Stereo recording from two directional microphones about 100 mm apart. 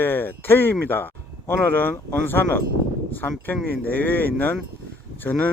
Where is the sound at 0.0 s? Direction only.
20° left (ahead or behind).